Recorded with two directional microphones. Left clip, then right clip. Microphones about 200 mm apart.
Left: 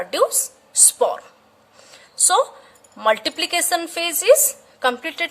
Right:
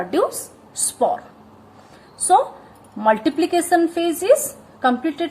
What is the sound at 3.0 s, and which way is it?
A woman's voice, 40° left (ahead or behind).